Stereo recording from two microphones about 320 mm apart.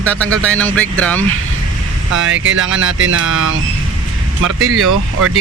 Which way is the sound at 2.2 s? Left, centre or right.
Right.